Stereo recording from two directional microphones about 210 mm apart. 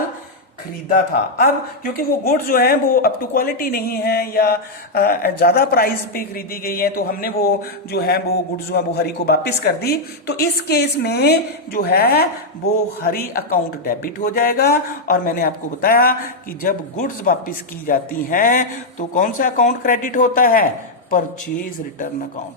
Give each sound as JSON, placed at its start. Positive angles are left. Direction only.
{"t": 0.9, "sound": "a woman's voice", "side_deg": 45}